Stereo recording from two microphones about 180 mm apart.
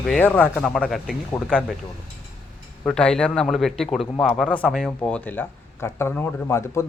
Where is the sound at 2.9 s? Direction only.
5° left (ahead or behind).